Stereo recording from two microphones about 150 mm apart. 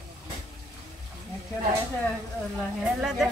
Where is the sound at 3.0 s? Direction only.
Centre (ahead or behind).